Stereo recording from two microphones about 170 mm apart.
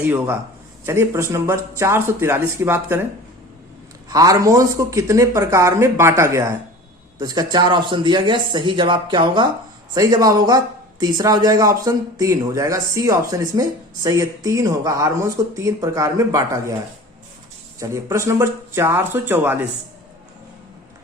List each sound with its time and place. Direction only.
0.0 s speech: 10° right (ahead or behind)
4.1 s speech: 20° right (ahead or behind)
17.7 s speech: 15° right (ahead or behind)